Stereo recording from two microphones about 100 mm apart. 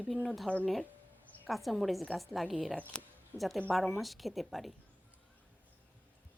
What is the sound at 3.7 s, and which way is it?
A woman's voice, centre (ahead or behind).